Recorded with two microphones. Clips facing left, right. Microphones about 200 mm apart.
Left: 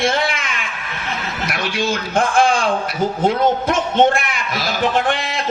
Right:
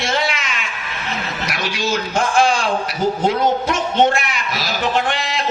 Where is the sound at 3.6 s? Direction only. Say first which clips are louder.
Left 1 dB; 55° left (ahead or behind).